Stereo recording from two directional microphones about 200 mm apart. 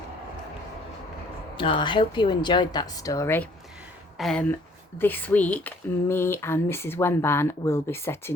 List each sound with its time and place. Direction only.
1.5 s a woman's voice: 25° left (ahead or behind)